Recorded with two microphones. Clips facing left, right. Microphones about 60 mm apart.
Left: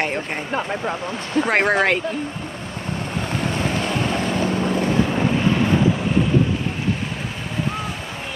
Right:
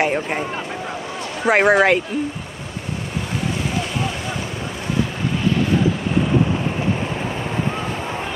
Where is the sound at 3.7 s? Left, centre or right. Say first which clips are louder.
Left 2 dB; left.